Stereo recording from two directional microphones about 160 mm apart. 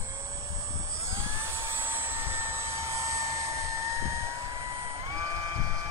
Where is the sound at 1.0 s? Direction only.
15° right (ahead or behind).